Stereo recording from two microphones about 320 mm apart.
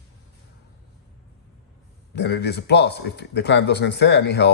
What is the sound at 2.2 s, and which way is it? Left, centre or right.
Speech, left.